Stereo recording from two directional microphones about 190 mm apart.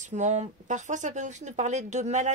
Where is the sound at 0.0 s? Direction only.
40° right (ahead or behind).